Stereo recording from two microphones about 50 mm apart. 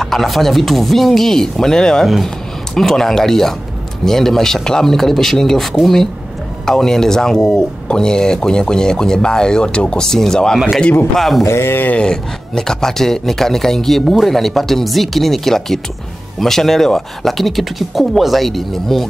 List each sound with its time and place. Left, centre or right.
0.0 s a man's voice: centre
11.4 s speech: left
12.0 s a man's voice: centre